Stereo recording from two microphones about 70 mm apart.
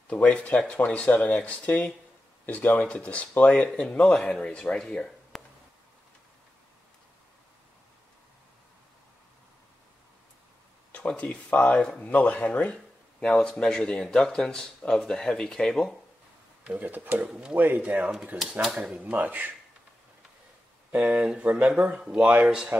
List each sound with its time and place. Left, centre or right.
0.1 s speech: centre
10.9 s speech: left
13.2 s speech: centre
16.6 s speech: right
17.3 s speech: centre
17.6 s speech: right
18.4 s speech: centre
18.9 s speech: centre
20.9 s speech: centre
22.2 s speech: right
22.5 s speech: centre